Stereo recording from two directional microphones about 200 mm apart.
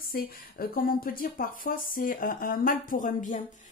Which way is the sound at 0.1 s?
45° left (ahead or behind).